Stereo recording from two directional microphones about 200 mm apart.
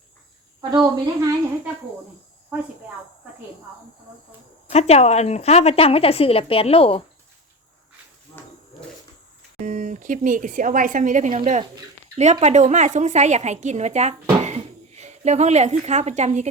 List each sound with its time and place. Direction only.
0.7 s a woman's voice: 20° right (ahead or behind)
4.7 s a woman's voice: 30° left (ahead or behind)
9.6 s a woman's voice: 40° right (ahead or behind)